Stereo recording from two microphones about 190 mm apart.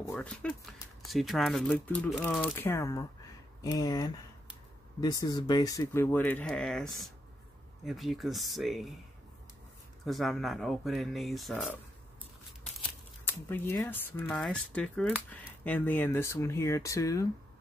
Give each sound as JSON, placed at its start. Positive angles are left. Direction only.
{"t": 0.1, "sound": "speech", "side_deg": 5}
{"t": 10.0, "sound": "speech", "side_deg": 0}
{"t": 13.3, "sound": "speech", "side_deg": 10}